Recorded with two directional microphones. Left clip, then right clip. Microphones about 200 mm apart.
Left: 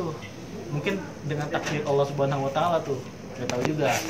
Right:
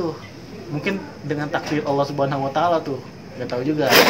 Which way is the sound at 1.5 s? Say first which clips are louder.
Right 4 dB; 50° right (ahead or behind).